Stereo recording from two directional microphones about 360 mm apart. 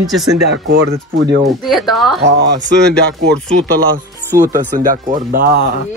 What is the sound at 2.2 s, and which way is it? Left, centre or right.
Speech, right.